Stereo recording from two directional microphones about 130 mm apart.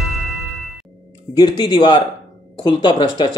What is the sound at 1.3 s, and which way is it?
Speech, 35° left (ahead or behind).